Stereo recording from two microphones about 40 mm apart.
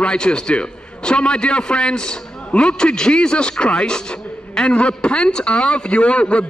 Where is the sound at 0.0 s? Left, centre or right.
Left.